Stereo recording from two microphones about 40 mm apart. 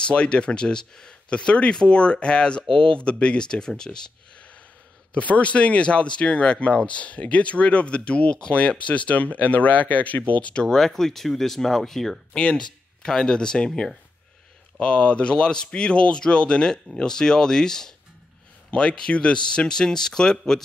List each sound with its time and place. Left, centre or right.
0.0 s speech: left
5.1 s speech: left
10.5 s speech: centre
12.4 s speech: left
14.8 s speech: left
18.7 s speech: left